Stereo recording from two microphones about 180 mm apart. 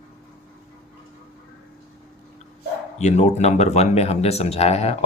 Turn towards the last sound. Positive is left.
turn(degrees=35)  # may be behind; listen again after turning